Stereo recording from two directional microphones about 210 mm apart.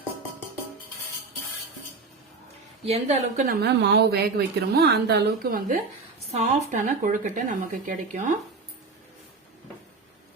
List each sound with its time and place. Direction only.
2.8 s a woman's voice: 30° right (ahead or behind)